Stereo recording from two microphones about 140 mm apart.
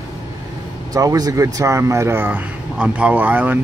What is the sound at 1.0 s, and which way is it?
Speech, 25° right (ahead or behind).